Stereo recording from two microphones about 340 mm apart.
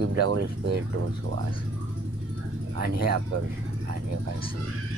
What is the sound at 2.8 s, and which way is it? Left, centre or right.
Speech, right.